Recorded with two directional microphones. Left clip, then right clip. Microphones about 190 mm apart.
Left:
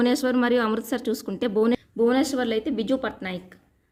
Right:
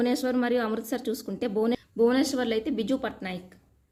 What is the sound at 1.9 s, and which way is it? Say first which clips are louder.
A woman's voice: left 2 dB; 5° left (ahead or behind).